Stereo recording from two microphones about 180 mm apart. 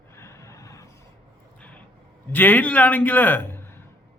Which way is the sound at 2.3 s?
10° left (ahead or behind).